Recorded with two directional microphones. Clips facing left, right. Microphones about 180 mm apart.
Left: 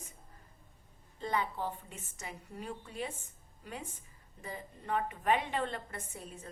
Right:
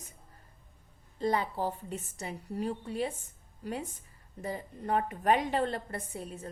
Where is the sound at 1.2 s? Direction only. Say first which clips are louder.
Right 5 dB; 40° right (ahead or behind).